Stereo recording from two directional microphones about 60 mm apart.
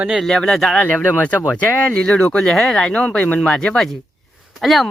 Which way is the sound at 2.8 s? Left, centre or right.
Centre.